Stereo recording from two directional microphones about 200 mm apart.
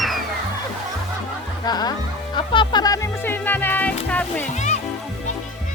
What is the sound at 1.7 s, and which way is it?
Music, 20° left (ahead or behind).